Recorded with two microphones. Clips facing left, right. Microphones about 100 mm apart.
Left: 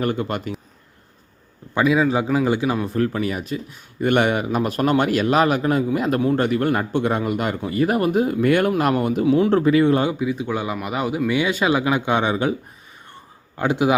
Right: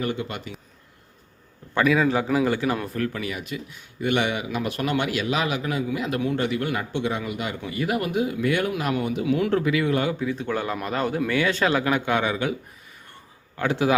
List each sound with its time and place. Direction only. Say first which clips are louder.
0.0 s speech: left 5 dB; 50° left (ahead or behind)
1.7 s speech: left 2 dB; 20° left (ahead or behind)
2.8 s speech: left 6 dB; 30° left (ahead or behind); by 9.2 s 45° left (ahead or behind)
9.2 s speech: left 6 dB; 30° left (ahead or behind)
10.1 s speech: left 3 dB; 15° left (ahead or behind); by 12.5 s 30° left (ahead or behind)
13.6 s speech: left 3 dB; 20° left (ahead or behind)